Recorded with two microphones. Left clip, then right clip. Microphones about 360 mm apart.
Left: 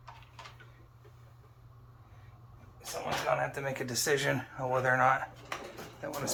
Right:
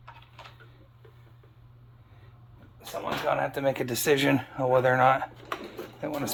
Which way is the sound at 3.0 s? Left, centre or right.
Centre.